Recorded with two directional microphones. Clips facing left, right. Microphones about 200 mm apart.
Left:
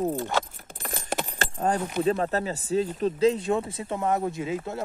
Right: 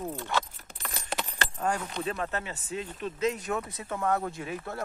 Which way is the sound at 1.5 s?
35° left (ahead or behind).